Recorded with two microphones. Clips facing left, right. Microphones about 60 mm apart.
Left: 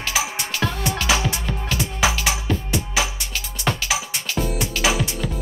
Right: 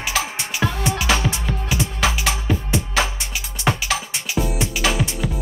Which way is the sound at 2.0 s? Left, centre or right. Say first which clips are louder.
Left 1 dB; centre.